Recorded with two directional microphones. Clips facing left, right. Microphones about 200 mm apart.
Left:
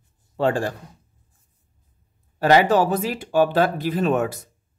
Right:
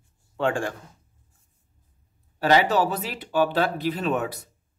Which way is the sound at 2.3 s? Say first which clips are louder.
Left 4 dB; 50° left (ahead or behind).